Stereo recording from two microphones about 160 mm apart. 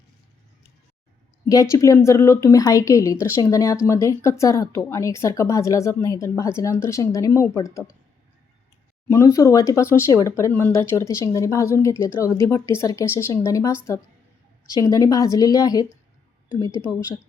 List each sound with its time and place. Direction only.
1.7 s speech: 15° left (ahead or behind)
9.0 s speech: 15° left (ahead or behind)
14.8 s speech: 20° left (ahead or behind)